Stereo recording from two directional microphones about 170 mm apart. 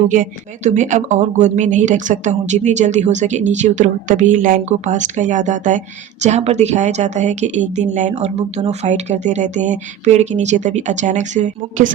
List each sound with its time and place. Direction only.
0.1 s speech: 45° right (ahead or behind)